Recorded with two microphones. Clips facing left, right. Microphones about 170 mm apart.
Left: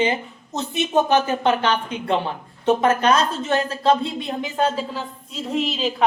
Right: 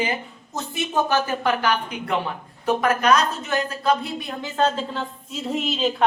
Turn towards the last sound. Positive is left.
turn(degrees=0)  # may be behind; listen again after turning